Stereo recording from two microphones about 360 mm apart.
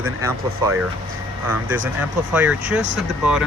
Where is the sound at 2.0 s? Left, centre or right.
Centre.